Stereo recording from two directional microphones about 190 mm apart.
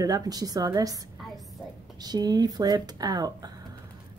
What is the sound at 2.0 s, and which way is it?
Speech, 20° right (ahead or behind).